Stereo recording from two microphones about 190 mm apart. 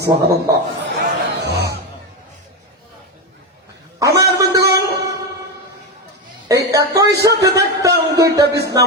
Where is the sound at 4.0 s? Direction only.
15° right (ahead or behind).